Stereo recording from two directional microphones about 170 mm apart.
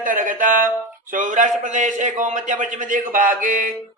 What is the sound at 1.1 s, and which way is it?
A man's voice, 50° right (ahead or behind).